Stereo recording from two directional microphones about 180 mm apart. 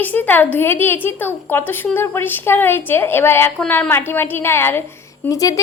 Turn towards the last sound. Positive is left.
turn(degrees=20)  # may be behind; listen again after turning